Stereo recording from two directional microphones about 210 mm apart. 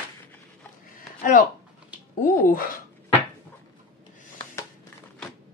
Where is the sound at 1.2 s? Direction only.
40° left (ahead or behind).